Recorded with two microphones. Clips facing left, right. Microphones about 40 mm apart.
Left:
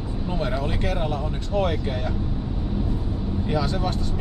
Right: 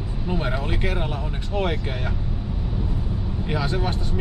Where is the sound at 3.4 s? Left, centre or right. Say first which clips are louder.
Even; right.